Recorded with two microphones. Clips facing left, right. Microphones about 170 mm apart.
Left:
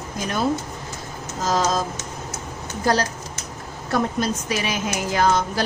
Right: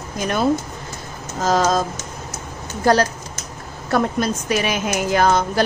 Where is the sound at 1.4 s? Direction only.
55° right (ahead or behind).